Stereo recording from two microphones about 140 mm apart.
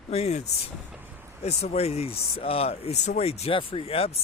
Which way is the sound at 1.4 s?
50° left (ahead or behind).